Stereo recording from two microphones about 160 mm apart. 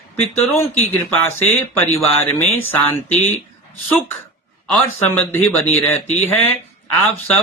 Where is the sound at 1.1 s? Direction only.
15° left (ahead or behind).